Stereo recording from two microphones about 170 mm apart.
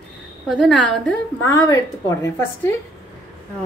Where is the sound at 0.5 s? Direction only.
5° left (ahead or behind).